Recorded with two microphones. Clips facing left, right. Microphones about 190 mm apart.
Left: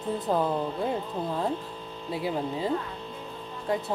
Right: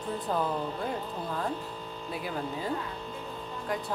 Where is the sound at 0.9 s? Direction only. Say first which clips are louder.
Left 4 dB; 25° left (ahead or behind).